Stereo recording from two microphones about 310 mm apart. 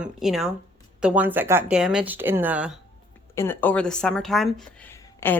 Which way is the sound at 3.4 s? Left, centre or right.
Centre.